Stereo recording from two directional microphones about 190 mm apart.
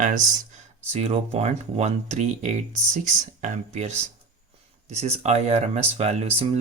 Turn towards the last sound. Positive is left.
turn(degrees=-35)  # may be behind; listen again after turning